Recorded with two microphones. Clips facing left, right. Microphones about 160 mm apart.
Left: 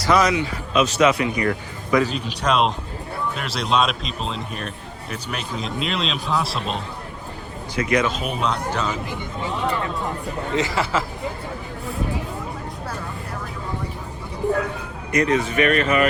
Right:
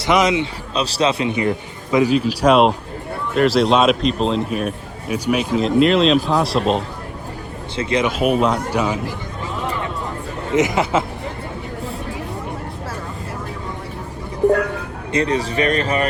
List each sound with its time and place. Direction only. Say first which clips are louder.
0.0 s a man's voice: right 2 dB; 20° right (ahead or behind)
0.7 s a man's voice: left 2 dB; 35° right (ahead or behind)
2.1 s speech: right 7 dB; 5° right (ahead or behind)
7.8 s a man's voice: right 1 dB; 30° right (ahead or behind)
8.0 s speech: right 7 dB; 10° right (ahead or behind)
10.5 s a man's voice: right 6 dB; 20° right (ahead or behind)
15.1 s speech: even; 30° right (ahead or behind)